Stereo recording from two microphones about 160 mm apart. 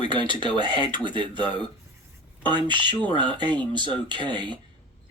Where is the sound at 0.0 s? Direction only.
30° right (ahead or behind).